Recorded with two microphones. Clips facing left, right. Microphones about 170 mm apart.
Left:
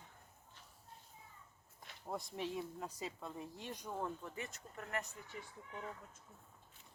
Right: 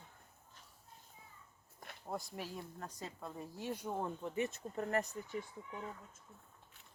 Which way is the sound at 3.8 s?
25° right (ahead or behind).